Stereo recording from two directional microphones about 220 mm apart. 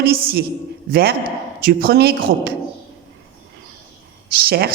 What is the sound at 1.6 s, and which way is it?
Speech, 45° right (ahead or behind).